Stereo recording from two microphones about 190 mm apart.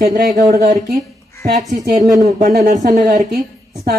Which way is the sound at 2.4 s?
50° right (ahead or behind).